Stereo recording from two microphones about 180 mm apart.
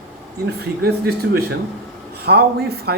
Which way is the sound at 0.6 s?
60° right (ahead or behind).